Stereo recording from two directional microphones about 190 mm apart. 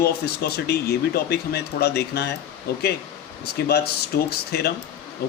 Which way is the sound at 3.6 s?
55° left (ahead or behind).